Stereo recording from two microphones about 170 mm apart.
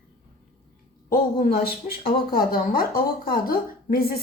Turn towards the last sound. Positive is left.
turn(degrees=60)  # may be behind; listen again after turning